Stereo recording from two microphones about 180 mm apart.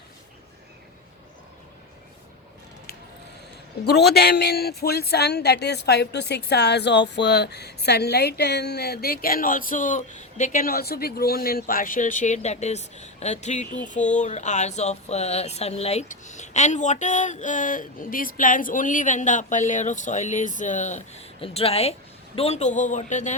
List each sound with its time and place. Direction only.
3.8 s a man's voice: 65° left (ahead or behind); by 23.3 s 40° left (ahead or behind)